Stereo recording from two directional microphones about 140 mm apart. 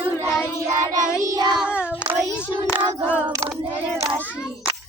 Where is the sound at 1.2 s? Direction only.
25° right (ahead or behind).